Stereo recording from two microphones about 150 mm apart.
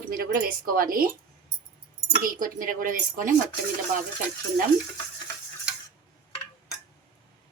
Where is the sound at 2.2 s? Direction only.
65° right (ahead or behind).